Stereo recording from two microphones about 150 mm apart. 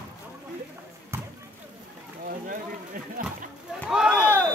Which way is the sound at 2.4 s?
65° right (ahead or behind).